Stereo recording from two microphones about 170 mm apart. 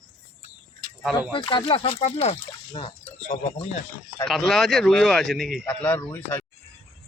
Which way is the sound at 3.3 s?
40° left (ahead or behind).